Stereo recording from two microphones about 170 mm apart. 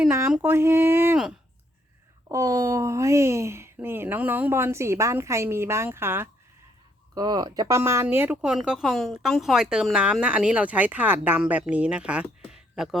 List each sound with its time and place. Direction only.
0.0 s a woman's voice: 10° right (ahead or behind)
2.3 s a woman's voice: 20° right (ahead or behind); by 13.0 s 5° right (ahead or behind)